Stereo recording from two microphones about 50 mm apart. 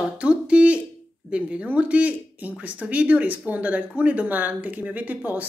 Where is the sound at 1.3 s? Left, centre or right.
Right.